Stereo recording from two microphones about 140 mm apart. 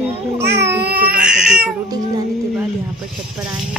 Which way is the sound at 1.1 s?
5° right (ahead or behind).